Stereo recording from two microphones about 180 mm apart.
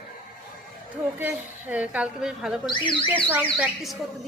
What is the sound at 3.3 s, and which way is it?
Speech, 5° right (ahead or behind).